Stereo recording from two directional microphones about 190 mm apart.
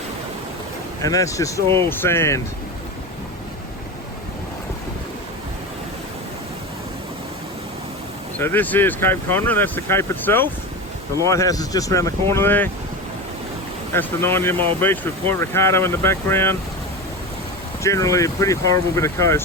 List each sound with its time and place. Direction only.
1.0 s speech: 15° left (ahead or behind)
8.4 s speech: 10° left (ahead or behind)
13.9 s speech: 10° left (ahead or behind)
17.8 s speech: 15° left (ahead or behind)